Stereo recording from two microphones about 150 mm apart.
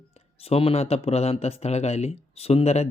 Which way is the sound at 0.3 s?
40° left (ahead or behind).